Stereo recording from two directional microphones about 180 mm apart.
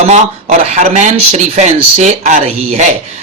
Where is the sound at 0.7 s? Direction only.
40° right (ahead or behind).